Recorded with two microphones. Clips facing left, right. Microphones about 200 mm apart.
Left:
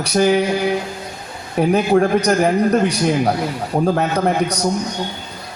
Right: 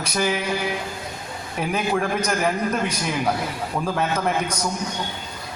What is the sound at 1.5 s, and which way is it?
A man's voice, 40° left (ahead or behind).